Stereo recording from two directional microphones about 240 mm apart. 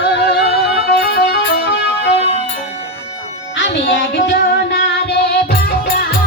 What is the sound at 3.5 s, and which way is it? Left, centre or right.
Music, left.